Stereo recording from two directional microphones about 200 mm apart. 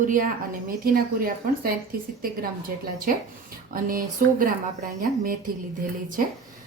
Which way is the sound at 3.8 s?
45° right (ahead or behind).